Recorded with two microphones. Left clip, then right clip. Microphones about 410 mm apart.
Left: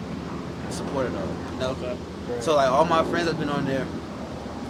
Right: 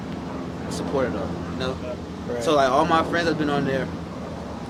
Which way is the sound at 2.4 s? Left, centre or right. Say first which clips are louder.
Right 1 dB; right.